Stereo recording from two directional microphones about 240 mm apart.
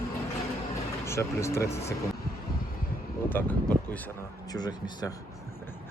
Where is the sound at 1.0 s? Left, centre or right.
Centre.